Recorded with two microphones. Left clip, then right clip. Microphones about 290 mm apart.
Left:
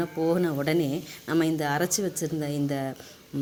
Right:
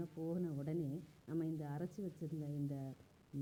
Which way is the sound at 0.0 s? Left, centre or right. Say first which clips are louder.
Left 19 dB; centre.